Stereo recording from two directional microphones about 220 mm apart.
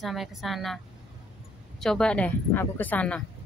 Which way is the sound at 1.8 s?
5° left (ahead or behind).